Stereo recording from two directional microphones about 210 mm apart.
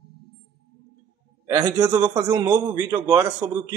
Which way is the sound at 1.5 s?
10° right (ahead or behind).